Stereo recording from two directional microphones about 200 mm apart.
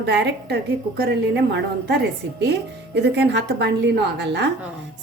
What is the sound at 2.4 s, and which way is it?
A woman's voice, 55° right (ahead or behind).